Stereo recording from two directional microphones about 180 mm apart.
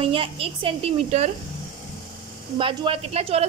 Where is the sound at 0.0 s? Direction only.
30° right (ahead or behind).